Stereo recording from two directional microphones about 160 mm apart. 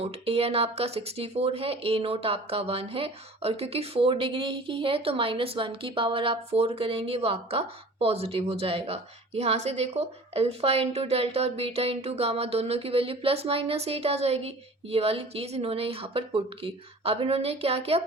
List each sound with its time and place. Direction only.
0.0 s speech: 40° right (ahead or behind)